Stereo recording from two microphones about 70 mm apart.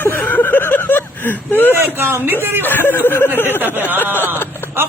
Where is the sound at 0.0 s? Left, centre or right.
Left.